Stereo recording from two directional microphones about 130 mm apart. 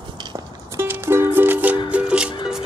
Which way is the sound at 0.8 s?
20° right (ahead or behind).